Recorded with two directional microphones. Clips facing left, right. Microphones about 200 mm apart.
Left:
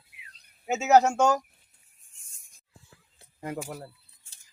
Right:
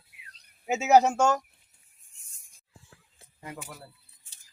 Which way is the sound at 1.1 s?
Centre (ahead or behind).